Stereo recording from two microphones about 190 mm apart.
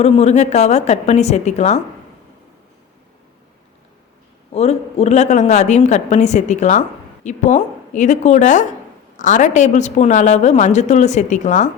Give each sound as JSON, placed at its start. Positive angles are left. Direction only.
{"t": 0.0, "sound": "a woman's voice", "side_deg": 35}
{"t": 4.5, "sound": "a woman's voice", "side_deg": 35}